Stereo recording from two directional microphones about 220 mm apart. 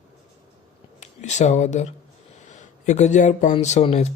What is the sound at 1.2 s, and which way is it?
Speech, 30° left (ahead or behind).